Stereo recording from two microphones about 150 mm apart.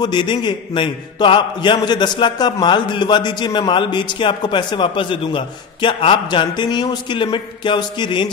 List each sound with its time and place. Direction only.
0.0 s a man's voice: 30° left (ahead or behind)